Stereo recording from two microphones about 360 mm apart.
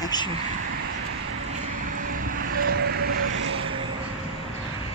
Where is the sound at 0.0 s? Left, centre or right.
Centre.